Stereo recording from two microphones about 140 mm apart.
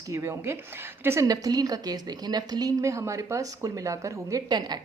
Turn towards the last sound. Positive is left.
turn(degrees=-30)  # may be behind; listen again after turning